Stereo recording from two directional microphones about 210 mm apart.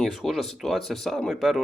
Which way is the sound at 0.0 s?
Centre (ahead or behind).